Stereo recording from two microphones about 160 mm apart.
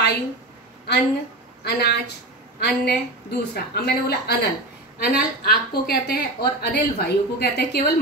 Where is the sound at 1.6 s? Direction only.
90° left.